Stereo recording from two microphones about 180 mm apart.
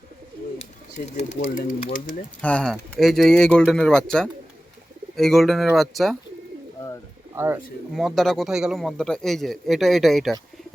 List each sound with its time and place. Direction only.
0.6 s speech: 40° left (ahead or behind)
1.8 s speech: 50° left (ahead or behind)
2.4 s a man's voice: 5° left (ahead or behind)
7.3 s speech: 15° right (ahead or behind)
7.9 s a man's voice: centre (ahead or behind)